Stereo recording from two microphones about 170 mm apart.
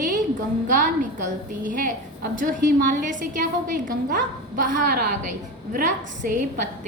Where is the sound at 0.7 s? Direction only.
50° right (ahead or behind).